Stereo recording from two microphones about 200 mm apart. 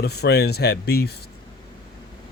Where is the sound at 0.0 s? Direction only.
55° left (ahead or behind).